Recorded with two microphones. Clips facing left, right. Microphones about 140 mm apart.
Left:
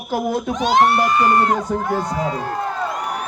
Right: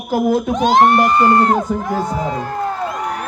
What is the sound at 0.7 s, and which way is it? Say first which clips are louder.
Speech: right 3 dB; 45° right (ahead or behind).